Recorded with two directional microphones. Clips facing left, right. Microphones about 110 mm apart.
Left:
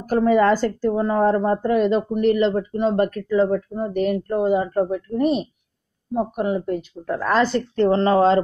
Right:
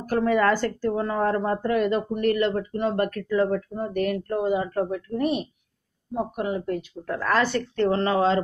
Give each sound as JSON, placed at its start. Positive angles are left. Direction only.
{"t": 0.1, "sound": "speech", "side_deg": 25}